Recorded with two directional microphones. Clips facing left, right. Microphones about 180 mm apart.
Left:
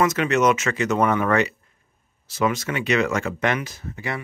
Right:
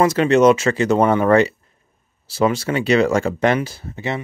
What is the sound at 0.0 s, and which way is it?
Speech, 30° right (ahead or behind).